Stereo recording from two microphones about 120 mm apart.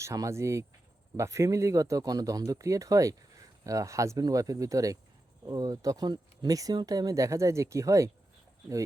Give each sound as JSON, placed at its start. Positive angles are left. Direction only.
{"t": 0.0, "sound": "speech", "side_deg": -25}